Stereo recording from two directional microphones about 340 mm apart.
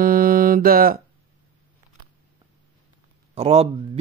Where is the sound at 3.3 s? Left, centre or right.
Centre.